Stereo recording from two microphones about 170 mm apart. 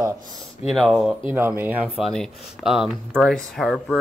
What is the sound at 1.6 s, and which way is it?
Speech, 10° right (ahead or behind).